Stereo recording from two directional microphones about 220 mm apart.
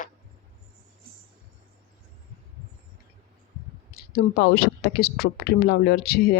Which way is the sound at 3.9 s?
45° left (ahead or behind).